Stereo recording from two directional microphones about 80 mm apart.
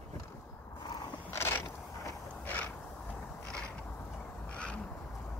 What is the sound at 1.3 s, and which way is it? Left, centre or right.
Mechanisms, left.